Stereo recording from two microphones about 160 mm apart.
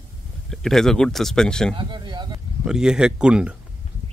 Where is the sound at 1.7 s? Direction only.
30° right (ahead or behind).